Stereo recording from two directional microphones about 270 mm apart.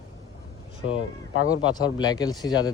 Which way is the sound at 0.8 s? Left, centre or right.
Left.